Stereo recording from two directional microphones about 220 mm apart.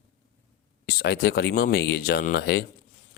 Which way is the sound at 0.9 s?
45° left (ahead or behind).